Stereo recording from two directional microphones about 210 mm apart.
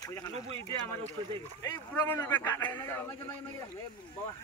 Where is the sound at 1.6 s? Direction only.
15° left (ahead or behind).